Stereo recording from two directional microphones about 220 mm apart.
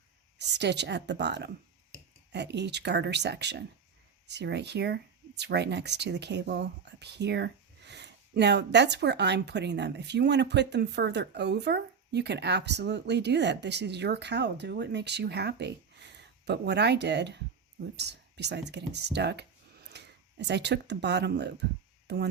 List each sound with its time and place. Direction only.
0.3 s speech: 50° right (ahead or behind)